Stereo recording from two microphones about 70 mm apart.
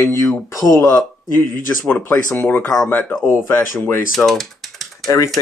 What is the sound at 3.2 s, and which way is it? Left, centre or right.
Speech, left.